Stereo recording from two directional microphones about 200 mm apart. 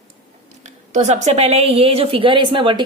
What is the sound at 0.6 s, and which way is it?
A woman's voice, 35° right (ahead or behind).